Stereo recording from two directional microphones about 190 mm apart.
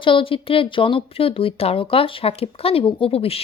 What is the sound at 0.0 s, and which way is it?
Speech, 25° left (ahead or behind).